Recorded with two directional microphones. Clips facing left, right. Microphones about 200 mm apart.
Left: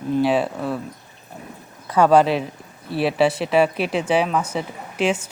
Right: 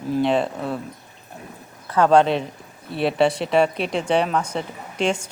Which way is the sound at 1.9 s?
10° left (ahead or behind).